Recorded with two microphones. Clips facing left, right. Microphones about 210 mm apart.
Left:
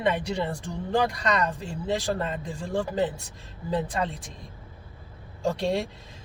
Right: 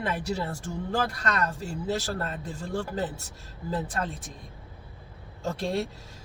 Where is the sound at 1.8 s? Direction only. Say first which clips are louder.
Left 3 dB; 5° right (ahead or behind).